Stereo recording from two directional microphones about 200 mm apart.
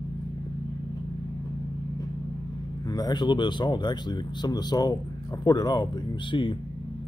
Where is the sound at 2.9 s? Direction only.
20° left (ahead or behind).